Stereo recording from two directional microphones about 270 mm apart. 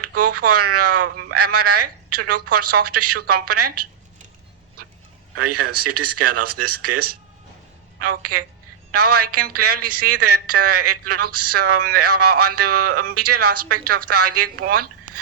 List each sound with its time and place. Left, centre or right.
0.0 s a woman's voice: right
5.3 s a woman's voice: right
8.2 s a woman's voice: right
12.9 s speech: right
13.1 s a woman's voice: right
14.7 s a sound: right